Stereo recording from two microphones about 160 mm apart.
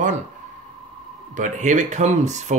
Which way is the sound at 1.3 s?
50° right (ahead or behind).